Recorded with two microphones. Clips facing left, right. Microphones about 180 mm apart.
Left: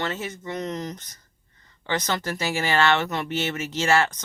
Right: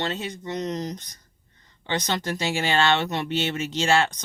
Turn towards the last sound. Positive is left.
turn(degrees=-25)  # may be behind; listen again after turning